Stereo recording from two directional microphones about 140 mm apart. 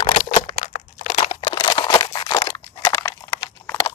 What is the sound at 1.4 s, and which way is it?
Crunch, 35° left (ahead or behind).